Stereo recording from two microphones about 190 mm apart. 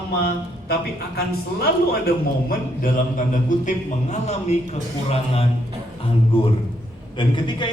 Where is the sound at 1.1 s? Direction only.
55° left (ahead or behind).